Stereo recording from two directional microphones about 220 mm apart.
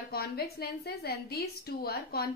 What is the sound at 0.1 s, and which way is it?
A woman's voice, 45° left (ahead or behind).